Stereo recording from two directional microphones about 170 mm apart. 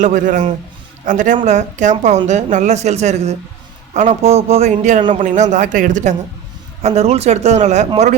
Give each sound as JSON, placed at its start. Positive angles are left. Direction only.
{"t": 0.0, "sound": "a woman's voice", "side_deg": -50}